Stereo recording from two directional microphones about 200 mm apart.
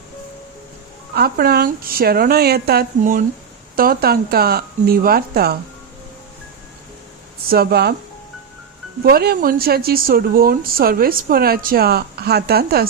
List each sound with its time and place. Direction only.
1.1 s a woman's voice: 50° right (ahead or behind)
7.5 s a woman's voice: 50° right (ahead or behind)
9.0 s a woman's voice: 50° right (ahead or behind)